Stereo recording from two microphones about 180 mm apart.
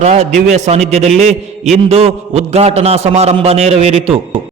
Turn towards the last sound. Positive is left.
turn(degrees=-35)  # may be behind; listen again after turning